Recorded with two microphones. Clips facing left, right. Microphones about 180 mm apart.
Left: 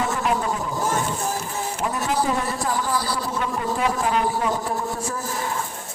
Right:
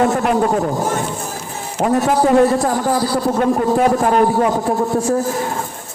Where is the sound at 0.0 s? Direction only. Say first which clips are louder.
Right 8 dB; 55° right (ahead or behind).